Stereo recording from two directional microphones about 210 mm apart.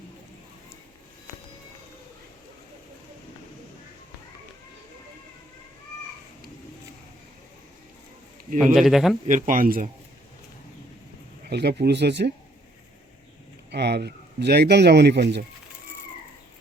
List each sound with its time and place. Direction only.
8.5 s speech: centre (ahead or behind)
9.2 s speech: 40° right (ahead or behind)
11.4 s speech: 50° right (ahead or behind)
13.7 s speech: 50° right (ahead or behind)